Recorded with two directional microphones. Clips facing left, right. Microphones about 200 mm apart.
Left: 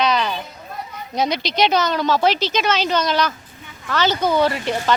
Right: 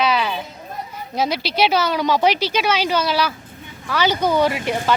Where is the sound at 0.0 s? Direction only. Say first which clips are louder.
Even; 5° right (ahead or behind).